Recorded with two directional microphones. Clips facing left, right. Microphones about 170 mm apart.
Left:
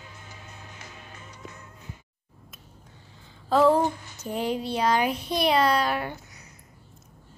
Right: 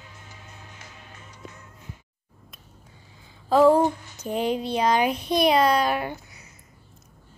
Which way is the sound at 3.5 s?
15° right (ahead or behind).